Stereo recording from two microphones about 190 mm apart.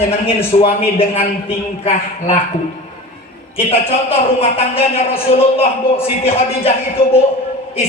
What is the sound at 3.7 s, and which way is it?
A man's voice, 30° left (ahead or behind).